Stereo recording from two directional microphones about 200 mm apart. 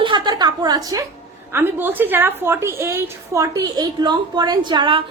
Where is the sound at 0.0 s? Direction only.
20° right (ahead or behind).